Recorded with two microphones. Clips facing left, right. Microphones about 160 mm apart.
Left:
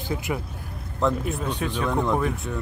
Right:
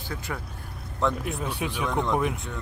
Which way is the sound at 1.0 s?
Centre (ahead or behind).